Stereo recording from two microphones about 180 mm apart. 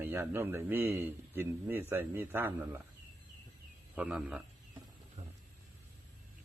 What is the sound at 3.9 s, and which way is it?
Speech, 5° right (ahead or behind).